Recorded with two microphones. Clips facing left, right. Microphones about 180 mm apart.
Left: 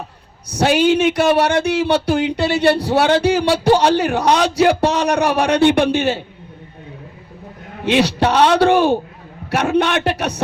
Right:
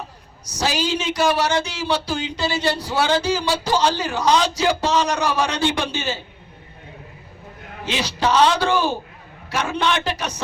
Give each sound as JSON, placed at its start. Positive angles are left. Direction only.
{"t": 0.4, "sound": "speech", "side_deg": 60}
{"t": 7.9, "sound": "speech", "side_deg": 65}